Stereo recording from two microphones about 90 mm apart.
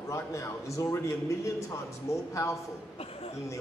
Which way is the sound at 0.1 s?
35° left (ahead or behind).